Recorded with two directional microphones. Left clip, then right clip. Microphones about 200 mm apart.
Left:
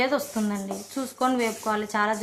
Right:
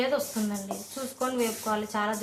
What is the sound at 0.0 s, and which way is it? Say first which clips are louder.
Speech: left 3 dB; 35° left (ahead or behind).